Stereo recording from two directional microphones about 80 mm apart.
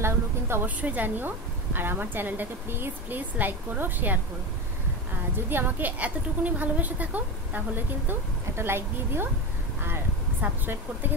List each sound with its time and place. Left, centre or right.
0.0 s a woman's voice: right
0.7 s a woman's voice: right
5.5 s a woman's voice: right